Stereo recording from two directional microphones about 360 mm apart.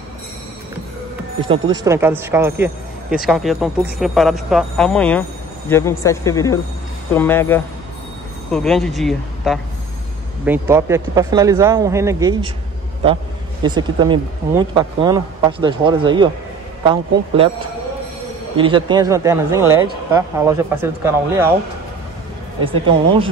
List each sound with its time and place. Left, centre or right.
1.5 s speech: centre
18.6 s speech: centre
22.7 s speech: centre